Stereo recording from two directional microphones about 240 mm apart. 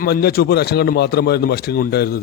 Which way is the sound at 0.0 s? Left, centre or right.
Left.